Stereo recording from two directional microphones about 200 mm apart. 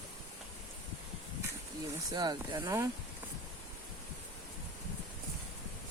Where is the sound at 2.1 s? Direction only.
20° right (ahead or behind).